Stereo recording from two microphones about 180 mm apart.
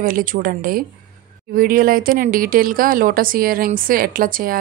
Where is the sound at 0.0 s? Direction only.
50° right (ahead or behind).